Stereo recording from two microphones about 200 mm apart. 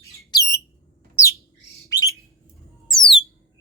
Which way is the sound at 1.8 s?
15° left (ahead or behind).